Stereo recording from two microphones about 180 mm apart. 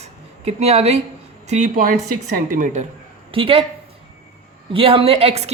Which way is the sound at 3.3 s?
30° right (ahead or behind).